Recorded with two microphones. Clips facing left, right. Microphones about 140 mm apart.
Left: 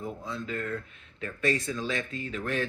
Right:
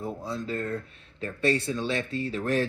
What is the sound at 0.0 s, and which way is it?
Speech, 35° right (ahead or behind).